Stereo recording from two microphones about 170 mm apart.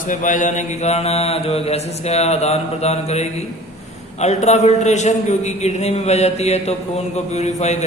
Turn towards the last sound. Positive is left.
turn(degrees=40)  # may be behind; listen again after turning